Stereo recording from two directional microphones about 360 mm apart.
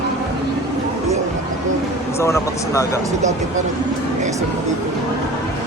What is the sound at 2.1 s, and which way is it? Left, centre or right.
Speech, centre.